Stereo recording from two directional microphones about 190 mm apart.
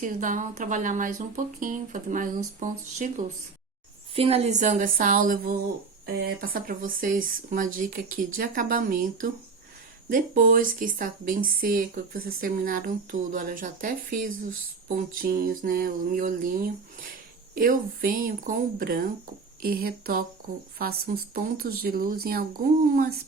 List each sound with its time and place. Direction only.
0.0 s speech: 45° right (ahead or behind)
4.1 s speech: 30° right (ahead or behind); by 23.2 s 50° right (ahead or behind)